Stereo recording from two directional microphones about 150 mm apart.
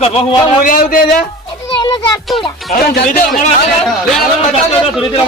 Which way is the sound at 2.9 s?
70° left (ahead or behind).